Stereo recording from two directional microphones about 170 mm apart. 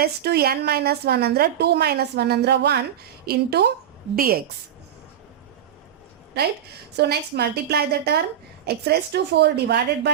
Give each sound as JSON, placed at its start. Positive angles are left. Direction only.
{"t": 0.0, "sound": "a woman's voice", "side_deg": -70}
{"t": 4.1, "sound": "a woman's voice", "side_deg": -60}
{"t": 6.9, "sound": "a woman's voice", "side_deg": -75}